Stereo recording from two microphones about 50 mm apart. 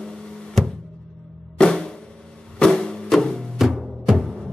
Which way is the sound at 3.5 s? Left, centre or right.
Centre.